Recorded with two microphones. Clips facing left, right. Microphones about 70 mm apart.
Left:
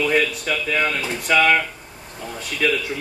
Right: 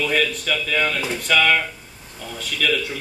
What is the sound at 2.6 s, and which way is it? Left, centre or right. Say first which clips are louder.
Speech: left 1 dB; left.